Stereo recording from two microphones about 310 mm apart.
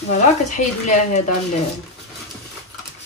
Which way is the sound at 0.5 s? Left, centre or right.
Left.